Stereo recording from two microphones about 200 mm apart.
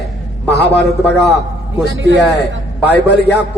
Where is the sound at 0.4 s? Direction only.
55° left (ahead or behind).